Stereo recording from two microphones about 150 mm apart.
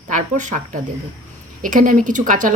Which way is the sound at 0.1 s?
55° right (ahead or behind).